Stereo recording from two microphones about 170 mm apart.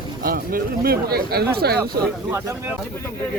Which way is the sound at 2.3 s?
15° right (ahead or behind).